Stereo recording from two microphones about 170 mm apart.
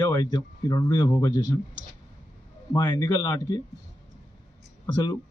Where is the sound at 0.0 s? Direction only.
20° left (ahead or behind).